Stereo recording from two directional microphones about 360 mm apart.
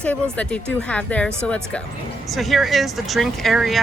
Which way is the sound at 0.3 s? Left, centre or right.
Centre.